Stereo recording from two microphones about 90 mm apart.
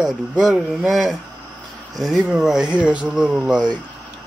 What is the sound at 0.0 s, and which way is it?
Speech, 5° right (ahead or behind).